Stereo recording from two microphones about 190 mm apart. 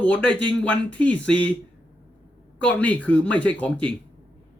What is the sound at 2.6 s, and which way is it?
Speech, 5° left (ahead or behind).